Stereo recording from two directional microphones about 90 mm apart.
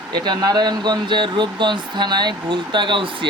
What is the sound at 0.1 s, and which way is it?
Speech, 55° right (ahead or behind).